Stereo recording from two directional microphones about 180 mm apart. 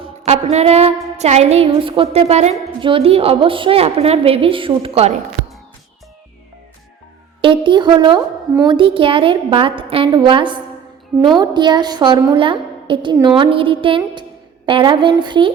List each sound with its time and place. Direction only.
0.0 s a woman's voice: 35° right (ahead or behind)
7.4 s a woman's voice: 25° right (ahead or behind)